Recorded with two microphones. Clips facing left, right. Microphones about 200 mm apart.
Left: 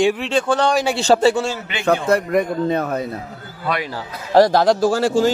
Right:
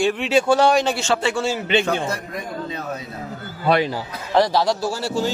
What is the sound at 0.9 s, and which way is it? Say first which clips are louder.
Speech: left 7 dB; 35° left (ahead or behind).